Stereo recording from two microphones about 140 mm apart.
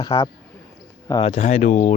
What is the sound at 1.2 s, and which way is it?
Speech, 50° left (ahead or behind).